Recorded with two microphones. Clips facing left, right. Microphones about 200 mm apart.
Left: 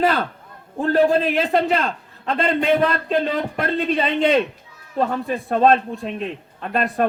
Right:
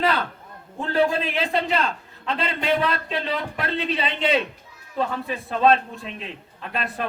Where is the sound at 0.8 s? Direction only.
50° left (ahead or behind).